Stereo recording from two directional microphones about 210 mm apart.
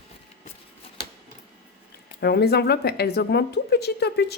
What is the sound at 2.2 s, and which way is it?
Speech, 50° left (ahead or behind).